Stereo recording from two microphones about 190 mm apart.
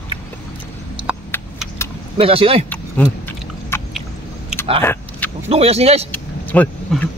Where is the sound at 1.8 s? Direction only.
15° left (ahead or behind).